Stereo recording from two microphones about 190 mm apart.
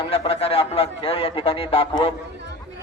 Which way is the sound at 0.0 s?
30° left (ahead or behind).